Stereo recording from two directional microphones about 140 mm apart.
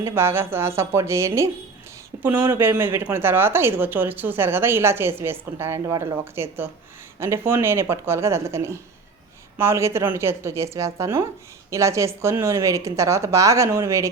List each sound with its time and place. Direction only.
0.0 s a woman's voice: 15° right (ahead or behind)